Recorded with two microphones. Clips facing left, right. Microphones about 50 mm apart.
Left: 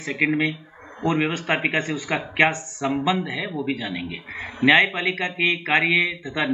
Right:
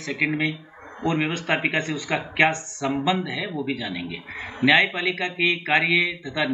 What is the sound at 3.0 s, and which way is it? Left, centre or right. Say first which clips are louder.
A man's voice: even; centre.